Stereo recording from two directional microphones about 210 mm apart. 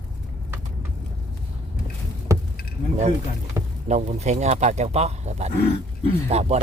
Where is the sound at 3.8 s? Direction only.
35° right (ahead or behind).